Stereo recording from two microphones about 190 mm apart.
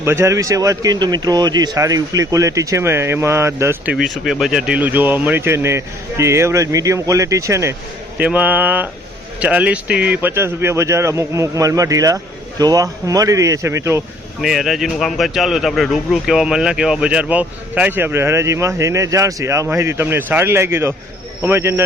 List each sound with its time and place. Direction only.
0.0 s speech: 15° right (ahead or behind)
3.9 s speech: centre (ahead or behind)
14.4 s speech: centre (ahead or behind)